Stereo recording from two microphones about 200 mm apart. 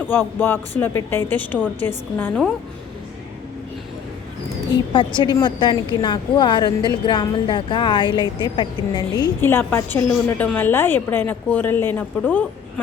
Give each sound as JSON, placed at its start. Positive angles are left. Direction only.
{"t": 0.1, "sound": "speech", "side_deg": 10}
{"t": 4.7, "sound": "a woman's voice", "side_deg": 20}